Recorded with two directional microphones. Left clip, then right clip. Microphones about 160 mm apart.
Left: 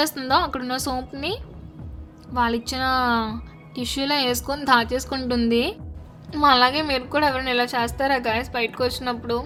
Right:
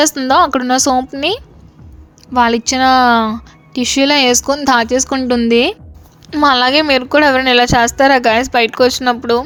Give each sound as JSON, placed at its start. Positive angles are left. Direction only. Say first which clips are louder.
{"t": 0.0, "sound": "a woman's voice", "louder": "right 10 dB", "side_deg": -45}
{"t": 5.5, "sound": "a woman's voice", "louder": "right 10 dB", "side_deg": -50}